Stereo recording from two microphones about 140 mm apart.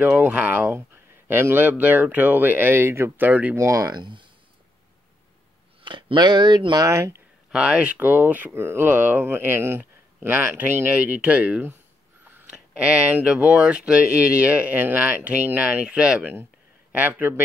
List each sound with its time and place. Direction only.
0.0 s speech: 10° right (ahead or behind); by 4.3 s 35° right (ahead or behind)
5.9 s speech: 35° right (ahead or behind)
7.5 s speech: 5° right (ahead or behind)